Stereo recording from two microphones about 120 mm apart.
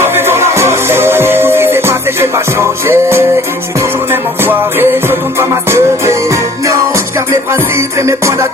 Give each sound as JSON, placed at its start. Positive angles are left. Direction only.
{"t": 0.0, "sound": "music", "side_deg": -20}